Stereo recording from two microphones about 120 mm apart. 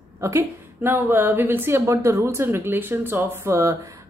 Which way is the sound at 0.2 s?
25° right (ahead or behind).